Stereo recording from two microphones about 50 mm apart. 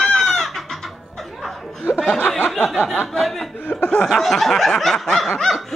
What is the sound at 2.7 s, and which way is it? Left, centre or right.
Snicker, centre.